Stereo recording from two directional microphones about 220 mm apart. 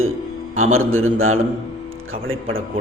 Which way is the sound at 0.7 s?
70° right (ahead or behind).